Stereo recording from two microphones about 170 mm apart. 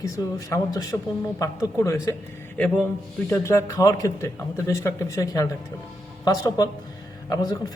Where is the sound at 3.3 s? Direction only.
15° left (ahead or behind).